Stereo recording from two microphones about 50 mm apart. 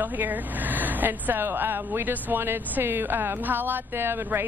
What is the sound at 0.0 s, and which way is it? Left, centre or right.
Speech, right.